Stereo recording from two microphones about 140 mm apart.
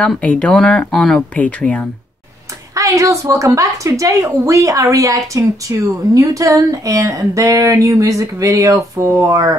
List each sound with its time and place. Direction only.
0.0 s speech: 10° left (ahead or behind)
2.7 s a woman's voice: 20° right (ahead or behind)